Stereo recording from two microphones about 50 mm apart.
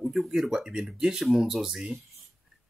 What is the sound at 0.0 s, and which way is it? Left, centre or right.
Speech, centre.